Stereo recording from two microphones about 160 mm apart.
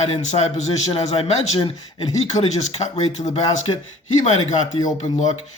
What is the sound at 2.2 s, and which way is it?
Speech, 45° left (ahead or behind).